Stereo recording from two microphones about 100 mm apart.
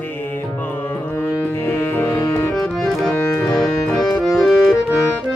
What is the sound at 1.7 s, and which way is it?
Music, 20° left (ahead or behind).